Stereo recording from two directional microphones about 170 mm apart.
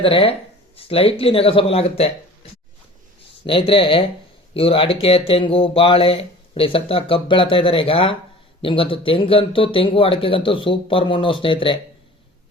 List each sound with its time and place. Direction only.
0.0 s speech: 35° left (ahead or behind)
3.4 s speech: 30° left (ahead or behind)